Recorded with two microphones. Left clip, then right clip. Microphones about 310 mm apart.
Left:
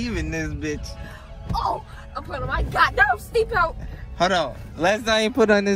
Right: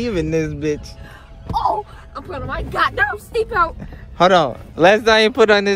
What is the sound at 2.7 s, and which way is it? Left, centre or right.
Speech, right.